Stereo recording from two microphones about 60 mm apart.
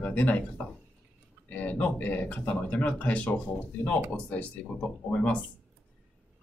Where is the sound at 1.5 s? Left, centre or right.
Left.